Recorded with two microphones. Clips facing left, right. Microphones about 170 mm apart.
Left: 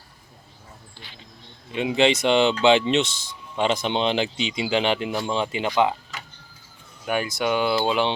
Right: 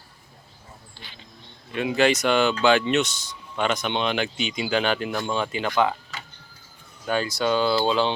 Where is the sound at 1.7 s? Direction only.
20° left (ahead or behind).